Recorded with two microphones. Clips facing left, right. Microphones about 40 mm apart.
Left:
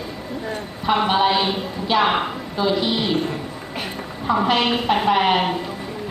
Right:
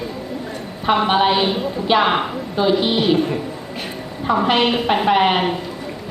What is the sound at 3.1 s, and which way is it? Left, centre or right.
A woman's voice, centre.